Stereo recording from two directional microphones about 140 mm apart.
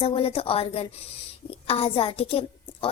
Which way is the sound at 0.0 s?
45° left (ahead or behind).